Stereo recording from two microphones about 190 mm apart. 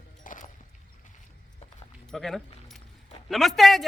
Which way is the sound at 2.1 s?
Centre (ahead or behind).